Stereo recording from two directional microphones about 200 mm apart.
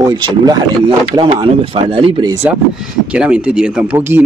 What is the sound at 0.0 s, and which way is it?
Speech, 20° right (ahead or behind).